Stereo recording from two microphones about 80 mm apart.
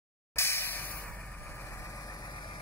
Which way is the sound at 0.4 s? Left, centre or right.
Left.